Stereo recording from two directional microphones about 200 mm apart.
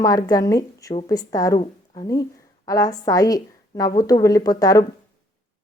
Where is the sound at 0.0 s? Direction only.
20° left (ahead or behind).